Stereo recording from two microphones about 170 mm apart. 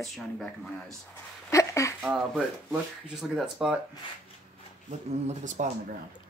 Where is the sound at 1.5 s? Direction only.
15° left (ahead or behind).